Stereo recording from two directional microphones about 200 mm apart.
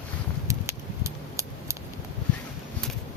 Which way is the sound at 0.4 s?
15° right (ahead or behind).